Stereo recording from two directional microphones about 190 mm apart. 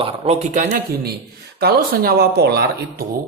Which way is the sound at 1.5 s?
55° right (ahead or behind).